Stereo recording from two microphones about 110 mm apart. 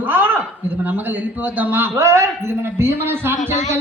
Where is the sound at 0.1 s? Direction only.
20° right (ahead or behind).